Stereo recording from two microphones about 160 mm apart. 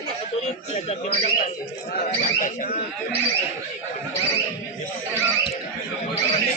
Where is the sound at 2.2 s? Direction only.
55° left (ahead or behind).